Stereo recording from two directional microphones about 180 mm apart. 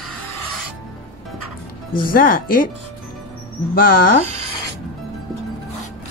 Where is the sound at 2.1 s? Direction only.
50° left (ahead or behind).